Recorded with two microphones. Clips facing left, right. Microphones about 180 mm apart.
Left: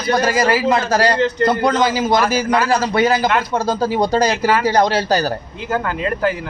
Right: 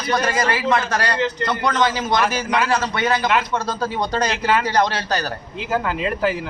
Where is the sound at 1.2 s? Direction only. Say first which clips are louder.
Left 6 dB; 50° left (ahead or behind).